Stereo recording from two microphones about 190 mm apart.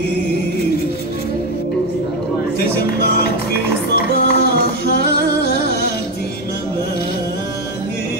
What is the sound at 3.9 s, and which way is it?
Music, 55° left (ahead or behind).